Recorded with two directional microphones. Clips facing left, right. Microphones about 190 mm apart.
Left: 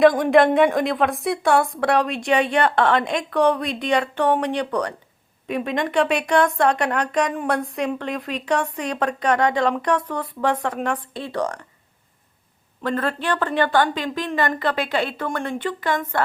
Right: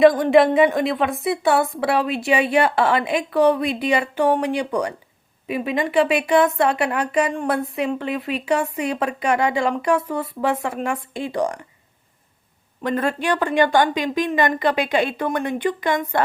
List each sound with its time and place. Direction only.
0.0 s a woman's voice: centre (ahead or behind)
12.8 s a woman's voice: 15° right (ahead or behind)